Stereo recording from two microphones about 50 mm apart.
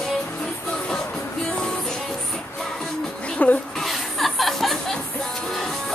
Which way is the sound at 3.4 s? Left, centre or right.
Left.